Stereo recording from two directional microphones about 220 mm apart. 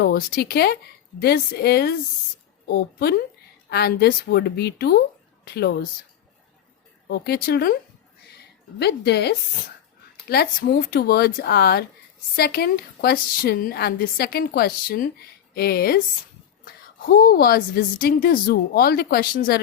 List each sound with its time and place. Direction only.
0.0 s a woman's voice: 45° left (ahead or behind)
7.1 s a woman's voice: 45° left (ahead or behind)
17.1 s a woman's voice: 40° left (ahead or behind)